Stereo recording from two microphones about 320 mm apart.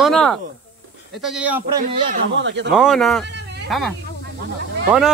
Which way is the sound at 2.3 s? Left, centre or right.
Right.